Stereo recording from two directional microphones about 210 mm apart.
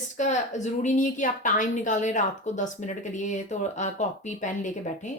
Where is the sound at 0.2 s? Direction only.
35° left (ahead or behind).